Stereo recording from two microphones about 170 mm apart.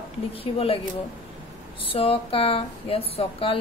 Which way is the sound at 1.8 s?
35° left (ahead or behind).